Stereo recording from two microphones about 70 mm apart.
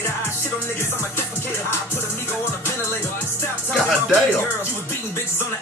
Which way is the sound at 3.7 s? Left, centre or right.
Centre.